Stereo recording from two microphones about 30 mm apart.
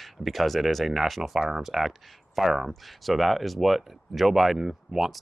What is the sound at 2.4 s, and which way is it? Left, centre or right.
Speech, centre.